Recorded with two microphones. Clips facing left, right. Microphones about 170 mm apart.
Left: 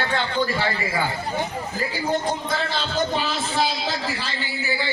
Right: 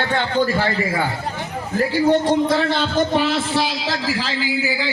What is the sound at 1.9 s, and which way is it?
A man's voice, 75° right (ahead or behind).